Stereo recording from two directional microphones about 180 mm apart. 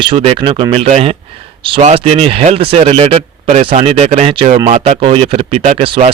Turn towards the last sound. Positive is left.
turn(degrees=-30)  # may be behind; listen again after turning